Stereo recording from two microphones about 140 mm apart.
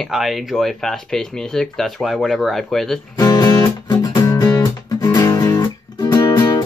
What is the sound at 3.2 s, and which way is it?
Music, 25° left (ahead or behind).